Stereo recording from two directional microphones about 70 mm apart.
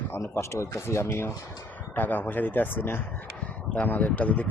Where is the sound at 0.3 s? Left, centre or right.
Left.